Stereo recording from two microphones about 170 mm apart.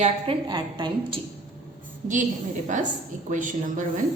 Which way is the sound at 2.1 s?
50° right (ahead or behind).